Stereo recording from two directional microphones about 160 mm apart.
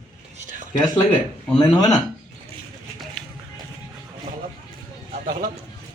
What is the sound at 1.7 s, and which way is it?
Speech, 25° left (ahead or behind).